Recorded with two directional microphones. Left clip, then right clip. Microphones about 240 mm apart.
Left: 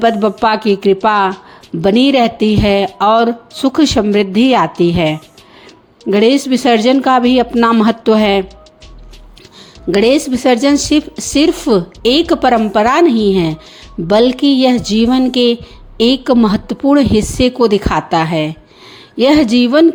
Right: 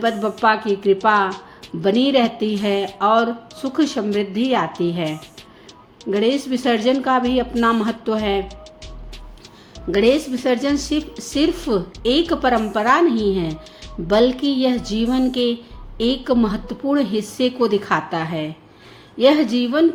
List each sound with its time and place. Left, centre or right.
0.0 s a woman's voice: left
9.9 s a woman's voice: left